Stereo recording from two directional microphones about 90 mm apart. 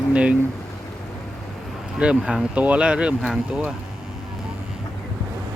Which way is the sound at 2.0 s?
10° right (ahead or behind).